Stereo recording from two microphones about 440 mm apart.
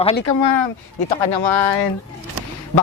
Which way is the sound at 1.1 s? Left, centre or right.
Left.